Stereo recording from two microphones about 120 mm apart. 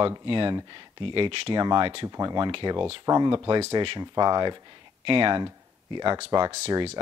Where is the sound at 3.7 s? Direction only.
40° right (ahead or behind).